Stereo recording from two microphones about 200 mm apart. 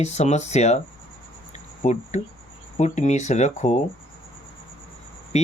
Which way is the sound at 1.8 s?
35° left (ahead or behind).